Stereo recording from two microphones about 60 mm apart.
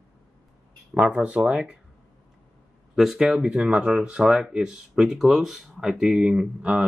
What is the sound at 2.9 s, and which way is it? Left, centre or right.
Speech, centre.